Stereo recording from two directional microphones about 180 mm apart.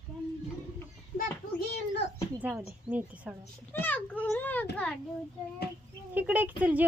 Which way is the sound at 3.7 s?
10° left (ahead or behind).